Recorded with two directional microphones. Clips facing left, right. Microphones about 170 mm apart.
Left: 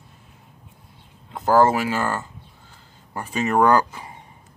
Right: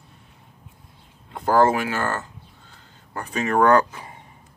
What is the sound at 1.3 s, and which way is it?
Speech, 5° left (ahead or behind).